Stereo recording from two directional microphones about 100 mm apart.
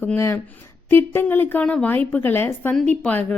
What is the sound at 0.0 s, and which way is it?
A woman's voice, 25° left (ahead or behind).